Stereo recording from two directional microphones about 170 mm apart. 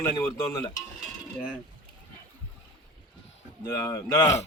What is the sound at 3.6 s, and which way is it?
Speech, 15° left (ahead or behind).